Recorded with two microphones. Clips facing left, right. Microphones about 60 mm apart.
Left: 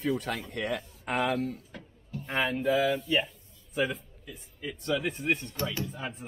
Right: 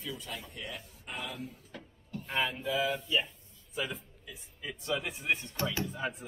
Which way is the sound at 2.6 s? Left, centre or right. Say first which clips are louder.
Left 6 dB; left.